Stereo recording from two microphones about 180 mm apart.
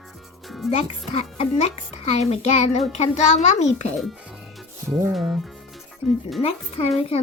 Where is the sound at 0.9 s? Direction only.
35° left (ahead or behind).